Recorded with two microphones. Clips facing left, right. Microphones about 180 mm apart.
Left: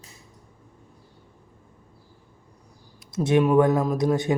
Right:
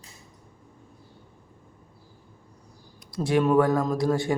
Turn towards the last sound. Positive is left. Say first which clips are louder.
# left 2 dB
turn(degrees=20)  # may be behind; listen again after turning